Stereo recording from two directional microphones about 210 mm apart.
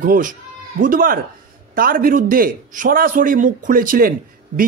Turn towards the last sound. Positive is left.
turn(degrees=-40)  # may be behind; listen again after turning